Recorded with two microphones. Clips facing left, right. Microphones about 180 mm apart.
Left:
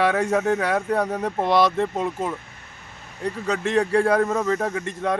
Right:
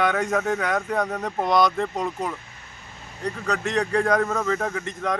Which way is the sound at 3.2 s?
30° left (ahead or behind).